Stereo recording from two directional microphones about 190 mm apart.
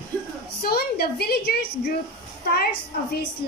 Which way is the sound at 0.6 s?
55° left (ahead or behind).